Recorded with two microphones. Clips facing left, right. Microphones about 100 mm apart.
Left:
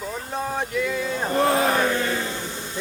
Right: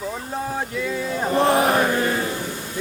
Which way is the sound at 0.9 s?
30° right (ahead or behind).